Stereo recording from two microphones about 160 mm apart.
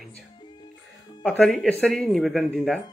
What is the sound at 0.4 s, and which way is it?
Music, 30° left (ahead or behind).